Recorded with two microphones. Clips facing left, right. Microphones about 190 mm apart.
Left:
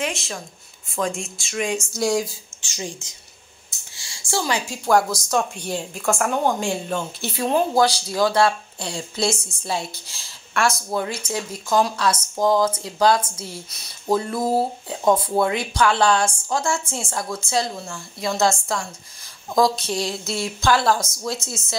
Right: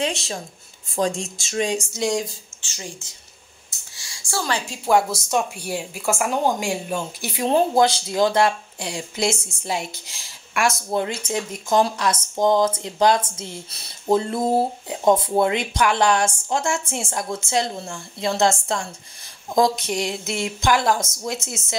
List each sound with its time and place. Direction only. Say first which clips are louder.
0.0 s speech: right 2 dB; 30° right (ahead or behind)
1.9 s speech: left 2 dB; centre (ahead or behind)
2.6 s speech: left 4 dB; 15° left (ahead or behind)
3.9 s a sound: left 3 dB; 25° left (ahead or behind)
4.6 s speech: right 1 dB; 5° right (ahead or behind)
7.4 s speech: right 1 dB; 25° right (ahead or behind)